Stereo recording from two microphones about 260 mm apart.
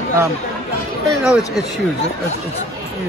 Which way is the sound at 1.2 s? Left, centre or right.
Centre.